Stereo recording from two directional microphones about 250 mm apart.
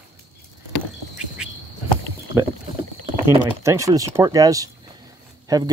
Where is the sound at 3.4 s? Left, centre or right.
Centre.